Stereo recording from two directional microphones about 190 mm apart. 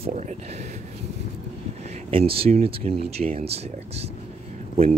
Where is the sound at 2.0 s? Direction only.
30° right (ahead or behind).